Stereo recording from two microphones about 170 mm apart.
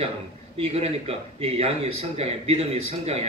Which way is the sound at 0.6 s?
35° right (ahead or behind).